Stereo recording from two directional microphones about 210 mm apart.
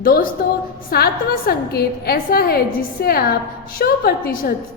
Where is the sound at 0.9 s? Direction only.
45° left (ahead or behind).